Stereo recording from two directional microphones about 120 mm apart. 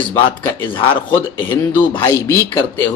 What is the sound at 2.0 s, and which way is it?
Speech, 20° left (ahead or behind).